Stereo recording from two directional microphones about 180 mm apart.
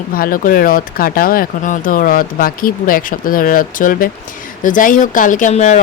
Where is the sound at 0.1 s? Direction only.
50° left (ahead or behind).